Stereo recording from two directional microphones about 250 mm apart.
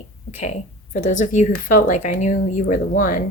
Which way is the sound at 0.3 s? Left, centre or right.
Left.